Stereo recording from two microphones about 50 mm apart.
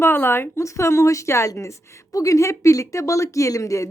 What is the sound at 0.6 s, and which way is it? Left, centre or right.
A woman's voice, left.